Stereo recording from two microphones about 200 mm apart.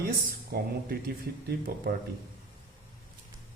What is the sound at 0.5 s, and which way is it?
Speech, 50° right (ahead or behind).